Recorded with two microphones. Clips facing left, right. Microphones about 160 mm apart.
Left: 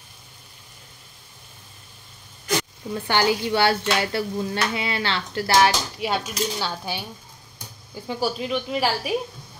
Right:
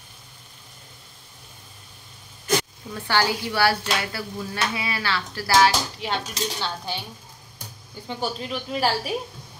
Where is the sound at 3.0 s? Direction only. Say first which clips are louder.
Left 2 dB; 20° left (ahead or behind).